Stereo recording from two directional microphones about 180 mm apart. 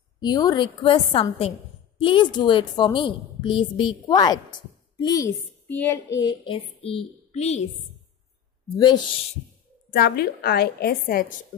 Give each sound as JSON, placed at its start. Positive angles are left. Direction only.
{"t": 0.2, "sound": "a woman's voice", "side_deg": 20}
{"t": 6.1, "sound": "child singing", "side_deg": 25}
{"t": 8.6, "sound": "speech", "side_deg": 25}
{"t": 9.8, "sound": "a woman's voice", "side_deg": 60}